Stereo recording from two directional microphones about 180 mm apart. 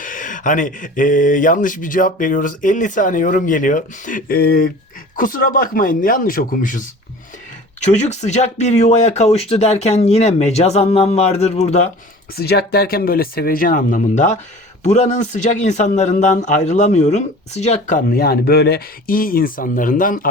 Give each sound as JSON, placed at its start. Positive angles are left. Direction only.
{"t": 0.0, "sound": "speech", "side_deg": 45}
{"t": 7.9, "sound": "speech", "side_deg": 40}
{"t": 12.4, "sound": "speech", "side_deg": 60}